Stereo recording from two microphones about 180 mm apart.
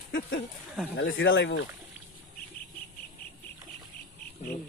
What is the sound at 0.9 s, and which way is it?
Speech, 90° left.